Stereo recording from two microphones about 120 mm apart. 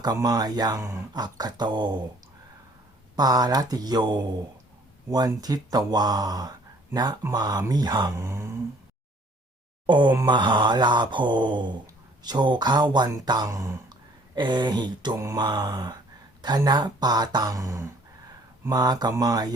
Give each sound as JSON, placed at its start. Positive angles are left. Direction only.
{"t": 0.0, "sound": "speech", "side_deg": -30}
{"t": 3.2, "sound": "speech", "side_deg": -35}
{"t": 9.8, "sound": "speech", "side_deg": -40}
{"t": 14.3, "sound": "speech", "side_deg": -40}